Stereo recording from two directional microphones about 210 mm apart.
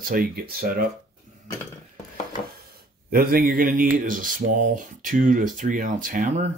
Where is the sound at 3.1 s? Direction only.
45° right (ahead or behind).